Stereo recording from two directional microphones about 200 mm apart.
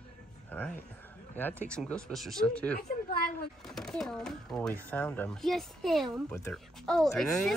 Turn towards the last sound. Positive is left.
turn(degrees=0)  # may be behind; listen again after turning